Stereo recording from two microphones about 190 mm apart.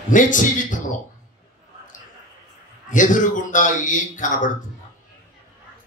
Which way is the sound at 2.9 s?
45° left (ahead or behind).